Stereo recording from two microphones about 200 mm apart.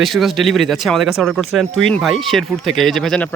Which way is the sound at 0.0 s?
Centre (ahead or behind).